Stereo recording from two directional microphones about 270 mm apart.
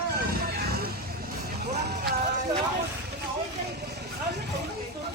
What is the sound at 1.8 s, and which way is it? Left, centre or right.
Music, right.